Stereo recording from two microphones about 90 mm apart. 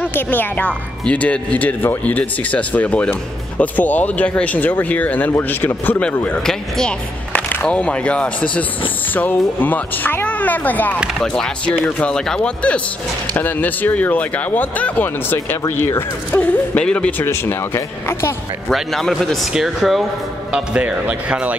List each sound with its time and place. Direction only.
0.0 s speech: 20° left (ahead or behind)
11.3 s speech: 10° left (ahead or behind)
17.2 s speech: 30° left (ahead or behind)
18.7 s speech: 5° left (ahead or behind)
20.5 s speech: 15° right (ahead or behind)